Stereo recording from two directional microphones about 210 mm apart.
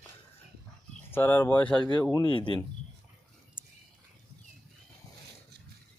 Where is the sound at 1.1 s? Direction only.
10° left (ahead or behind).